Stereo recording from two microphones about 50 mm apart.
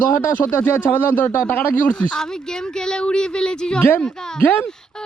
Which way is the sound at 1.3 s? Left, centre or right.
Left.